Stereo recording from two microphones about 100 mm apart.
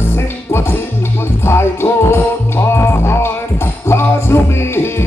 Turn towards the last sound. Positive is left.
turn(degrees=25)  # may be behind; listen again after turning